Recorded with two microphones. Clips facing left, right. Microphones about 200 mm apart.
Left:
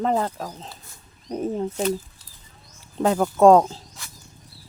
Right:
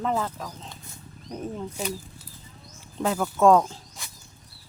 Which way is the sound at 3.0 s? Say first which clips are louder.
Left 5 dB; 40° left (ahead or behind).